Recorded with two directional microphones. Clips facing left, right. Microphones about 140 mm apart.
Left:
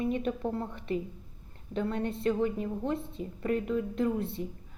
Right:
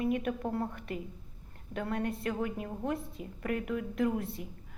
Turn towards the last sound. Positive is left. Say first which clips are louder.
# left 1 dB
turn(degrees=30)  # may be behind; listen again after turning